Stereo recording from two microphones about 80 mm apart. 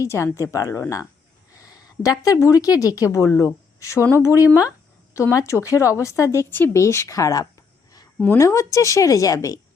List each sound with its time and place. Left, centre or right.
0.0 s a woman's voice: left
8.2 s a woman's voice: left